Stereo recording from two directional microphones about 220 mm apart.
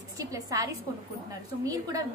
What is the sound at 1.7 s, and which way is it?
Speech, 15° right (ahead or behind).